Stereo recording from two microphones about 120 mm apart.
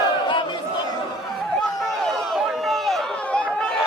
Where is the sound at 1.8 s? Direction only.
Centre (ahead or behind).